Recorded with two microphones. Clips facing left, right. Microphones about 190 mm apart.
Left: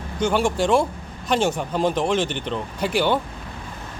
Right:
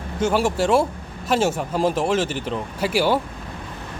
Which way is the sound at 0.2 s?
5° right (ahead or behind).